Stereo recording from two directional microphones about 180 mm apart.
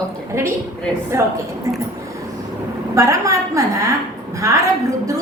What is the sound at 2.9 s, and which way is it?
A woman's voice, 15° right (ahead or behind).